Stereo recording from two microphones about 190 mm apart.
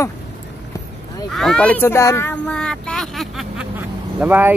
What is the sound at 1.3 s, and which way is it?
Speech, 5° left (ahead or behind).